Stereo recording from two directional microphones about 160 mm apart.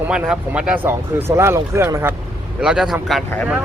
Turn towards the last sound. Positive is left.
turn(degrees=0)  # may be behind; listen again after turning